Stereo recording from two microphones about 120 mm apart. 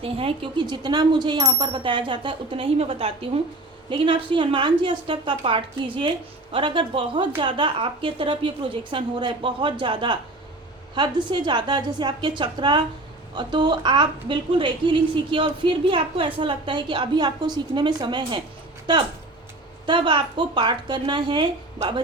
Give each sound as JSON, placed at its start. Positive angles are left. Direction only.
{"t": 0.0, "sound": "a woman's voice", "side_deg": -50}